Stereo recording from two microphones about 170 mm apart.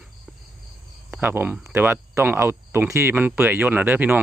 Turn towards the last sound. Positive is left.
turn(degrees=-10)  # may be behind; listen again after turning